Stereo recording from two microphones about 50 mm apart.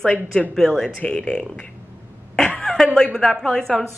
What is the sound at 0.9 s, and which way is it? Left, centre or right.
Speech, centre.